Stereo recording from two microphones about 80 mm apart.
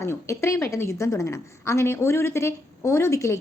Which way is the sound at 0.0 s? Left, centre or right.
Left.